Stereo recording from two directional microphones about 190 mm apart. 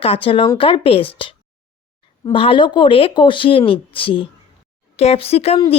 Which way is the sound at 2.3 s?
25° left (ahead or behind).